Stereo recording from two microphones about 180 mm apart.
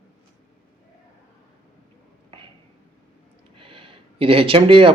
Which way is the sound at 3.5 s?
30° right (ahead or behind).